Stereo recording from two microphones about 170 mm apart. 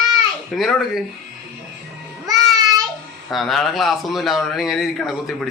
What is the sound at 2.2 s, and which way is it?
Child singing, 20° right (ahead or behind).